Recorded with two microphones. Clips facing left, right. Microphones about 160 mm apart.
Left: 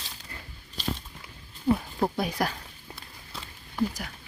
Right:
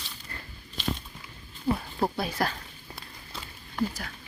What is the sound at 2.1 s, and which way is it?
Speech, 15° left (ahead or behind).